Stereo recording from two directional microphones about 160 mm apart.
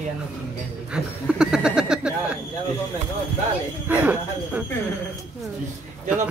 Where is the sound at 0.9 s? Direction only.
5° right (ahead or behind).